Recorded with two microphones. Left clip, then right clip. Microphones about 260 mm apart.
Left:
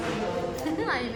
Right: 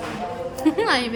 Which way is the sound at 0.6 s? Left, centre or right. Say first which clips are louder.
Right 11 dB; right.